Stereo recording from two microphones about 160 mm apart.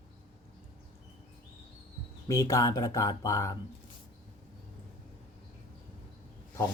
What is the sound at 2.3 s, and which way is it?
Speech, 20° left (ahead or behind).